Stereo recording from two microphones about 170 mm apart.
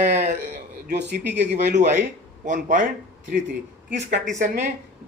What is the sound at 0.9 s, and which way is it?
Speech, 75° right (ahead or behind).